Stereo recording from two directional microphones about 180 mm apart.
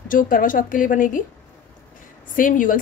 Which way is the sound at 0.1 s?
50° left (ahead or behind).